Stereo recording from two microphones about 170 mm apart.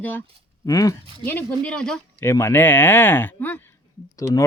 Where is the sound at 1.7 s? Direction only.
5° left (ahead or behind).